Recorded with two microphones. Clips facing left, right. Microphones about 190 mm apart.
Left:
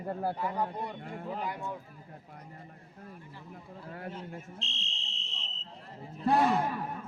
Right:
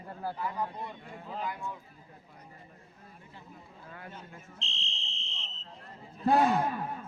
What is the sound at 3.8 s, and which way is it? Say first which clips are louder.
Speech: left 6 dB; 40° left (ahead or behind).